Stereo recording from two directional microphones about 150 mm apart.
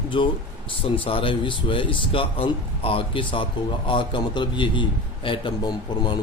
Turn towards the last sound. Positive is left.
turn(degrees=30)  # may be behind; listen again after turning